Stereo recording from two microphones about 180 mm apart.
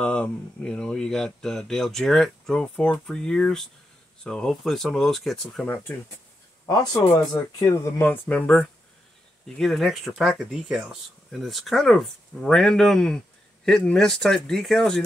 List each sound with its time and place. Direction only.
0.0 s speech: 5° left (ahead or behind)
6.6 s speech: 20° left (ahead or behind); by 15.0 s 5° left (ahead or behind)